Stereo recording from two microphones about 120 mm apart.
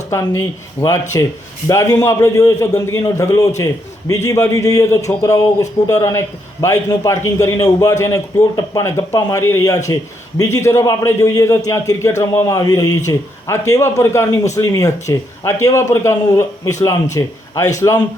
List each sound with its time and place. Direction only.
0.1 s a man's voice: 25° left (ahead or behind)